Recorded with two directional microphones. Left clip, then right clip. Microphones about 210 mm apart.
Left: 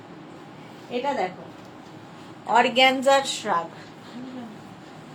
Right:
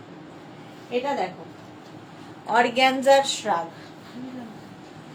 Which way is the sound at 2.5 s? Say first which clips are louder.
Left 1 dB; 5° left (ahead or behind).